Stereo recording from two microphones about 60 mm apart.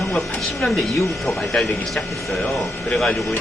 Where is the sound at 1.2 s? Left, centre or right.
Centre.